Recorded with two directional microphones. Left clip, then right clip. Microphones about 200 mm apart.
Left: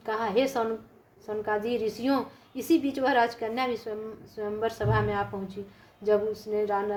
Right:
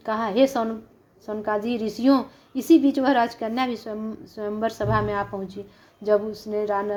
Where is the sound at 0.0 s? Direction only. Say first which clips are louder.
Right 5 dB; 40° right (ahead or behind).